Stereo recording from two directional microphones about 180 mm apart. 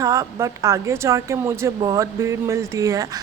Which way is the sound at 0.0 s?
20° right (ahead or behind).